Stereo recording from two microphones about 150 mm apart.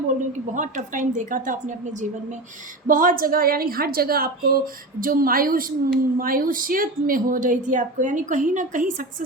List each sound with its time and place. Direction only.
0.5 s a woman's voice: 60° right (ahead or behind)
2.8 s a woman's voice: 65° right (ahead or behind)